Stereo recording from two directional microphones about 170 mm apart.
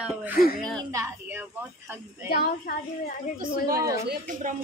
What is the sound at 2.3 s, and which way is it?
Speech, 65° left (ahead or behind).